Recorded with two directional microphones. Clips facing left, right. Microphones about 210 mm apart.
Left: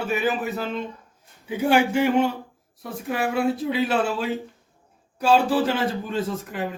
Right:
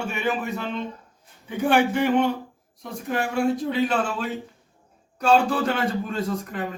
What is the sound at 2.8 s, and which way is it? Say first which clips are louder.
A man's voice: left 1 dB; 5° left (ahead or behind).